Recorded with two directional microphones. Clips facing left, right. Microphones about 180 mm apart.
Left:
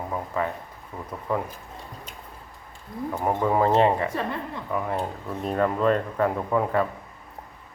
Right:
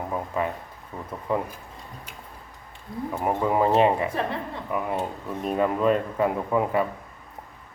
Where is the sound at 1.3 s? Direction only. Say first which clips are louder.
Right 1 dB; 15° right (ahead or behind).